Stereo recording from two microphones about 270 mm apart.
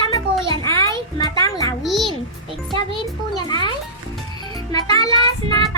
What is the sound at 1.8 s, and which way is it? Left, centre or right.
Speech, centre.